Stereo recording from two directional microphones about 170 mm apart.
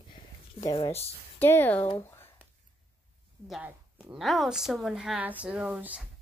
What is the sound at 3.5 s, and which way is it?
A woman's voice, 5° right (ahead or behind).